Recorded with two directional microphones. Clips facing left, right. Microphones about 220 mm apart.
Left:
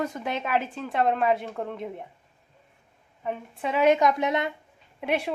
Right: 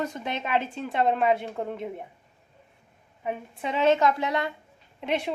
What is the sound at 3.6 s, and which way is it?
Speech, 5° left (ahead or behind).